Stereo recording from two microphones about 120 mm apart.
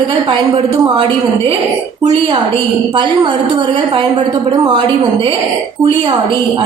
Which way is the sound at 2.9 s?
40° right (ahead or behind).